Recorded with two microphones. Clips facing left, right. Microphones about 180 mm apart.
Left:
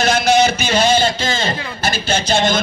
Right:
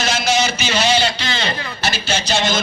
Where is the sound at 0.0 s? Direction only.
55° left (ahead or behind).